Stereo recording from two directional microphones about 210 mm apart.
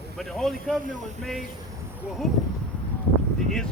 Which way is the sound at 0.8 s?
40° right (ahead or behind).